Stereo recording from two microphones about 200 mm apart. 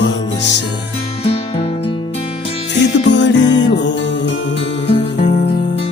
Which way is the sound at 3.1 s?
60° left (ahead or behind).